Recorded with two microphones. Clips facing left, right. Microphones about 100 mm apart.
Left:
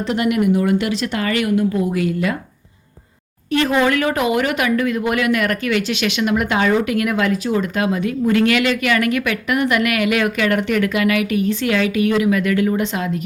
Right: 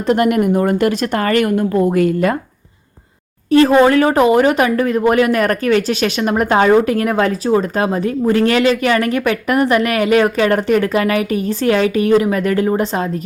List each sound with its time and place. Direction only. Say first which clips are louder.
0.1 s speech: right 4 dB; 45° right (ahead or behind)
3.5 s speech: right 7 dB; 35° right (ahead or behind)